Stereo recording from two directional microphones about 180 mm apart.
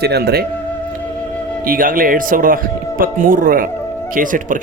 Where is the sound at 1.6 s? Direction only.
50° right (ahead or behind).